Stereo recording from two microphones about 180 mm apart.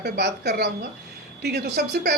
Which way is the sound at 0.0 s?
65° right (ahead or behind).